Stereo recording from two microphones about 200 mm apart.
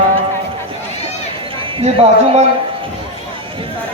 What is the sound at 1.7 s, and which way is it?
Speech, 30° right (ahead or behind).